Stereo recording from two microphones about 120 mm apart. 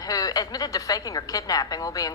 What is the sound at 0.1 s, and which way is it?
A woman's voice, 30° left (ahead or behind).